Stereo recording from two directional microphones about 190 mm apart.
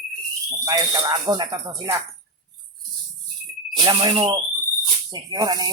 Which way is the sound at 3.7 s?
25° right (ahead or behind).